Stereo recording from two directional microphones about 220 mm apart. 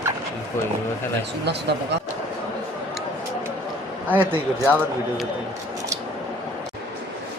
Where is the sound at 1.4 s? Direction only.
50° right (ahead or behind).